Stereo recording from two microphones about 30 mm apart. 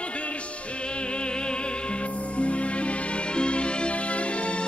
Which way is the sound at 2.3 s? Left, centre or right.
Left.